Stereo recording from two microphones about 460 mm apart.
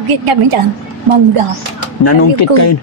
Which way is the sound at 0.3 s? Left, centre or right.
Right.